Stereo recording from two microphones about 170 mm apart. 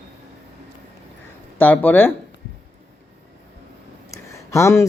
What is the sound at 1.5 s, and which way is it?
Speech, 10° left (ahead or behind).